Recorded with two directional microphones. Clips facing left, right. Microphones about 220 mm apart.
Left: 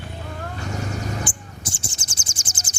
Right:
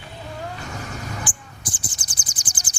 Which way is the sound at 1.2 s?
25° left (ahead or behind).